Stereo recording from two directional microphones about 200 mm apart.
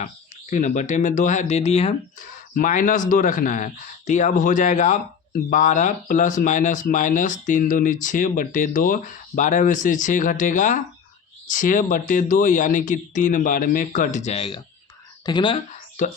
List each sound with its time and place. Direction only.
0.5 s speech: 35° left (ahead or behind)
2.6 s speech: 40° left (ahead or behind); by 15.6 s 25° left (ahead or behind)